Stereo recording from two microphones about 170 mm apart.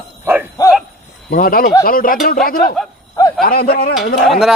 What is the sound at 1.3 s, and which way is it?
Speech, 60° left (ahead or behind).